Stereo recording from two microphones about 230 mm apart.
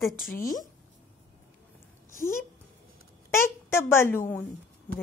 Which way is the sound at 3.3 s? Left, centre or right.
Centre.